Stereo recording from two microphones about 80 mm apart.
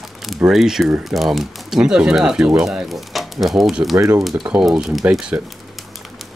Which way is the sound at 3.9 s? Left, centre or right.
Right.